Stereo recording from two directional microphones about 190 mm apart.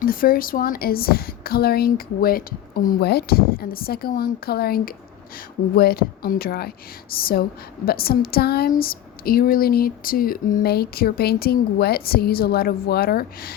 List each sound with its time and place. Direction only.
0.0 s speech: 50° left (ahead or behind)